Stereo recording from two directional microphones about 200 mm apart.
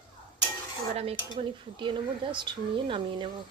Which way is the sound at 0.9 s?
35° right (ahead or behind).